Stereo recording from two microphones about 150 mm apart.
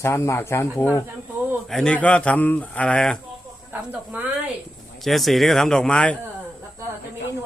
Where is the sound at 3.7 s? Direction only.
10° right (ahead or behind).